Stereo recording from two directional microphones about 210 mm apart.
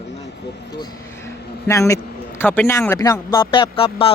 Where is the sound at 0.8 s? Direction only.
15° left (ahead or behind).